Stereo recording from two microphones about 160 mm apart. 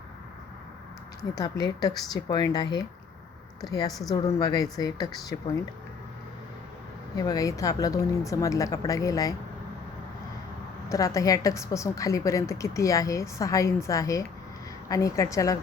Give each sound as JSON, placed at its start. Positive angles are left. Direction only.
{"t": 1.4, "sound": "a woman's voice", "side_deg": 25}
{"t": 7.2, "sound": "a woman's voice", "side_deg": 20}
{"t": 10.8, "sound": "a woman's voice", "side_deg": 20}